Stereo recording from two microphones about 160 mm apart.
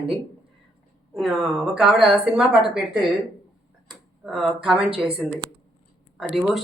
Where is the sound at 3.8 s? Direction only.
Centre (ahead or behind).